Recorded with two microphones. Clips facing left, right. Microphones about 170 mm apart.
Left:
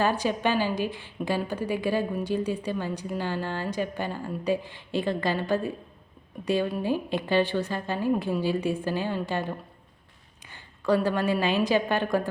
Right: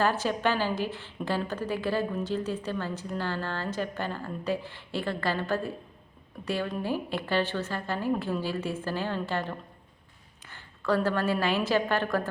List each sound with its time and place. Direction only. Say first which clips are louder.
0.0 s a woman's voice: left 1 dB; 15° left (ahead or behind)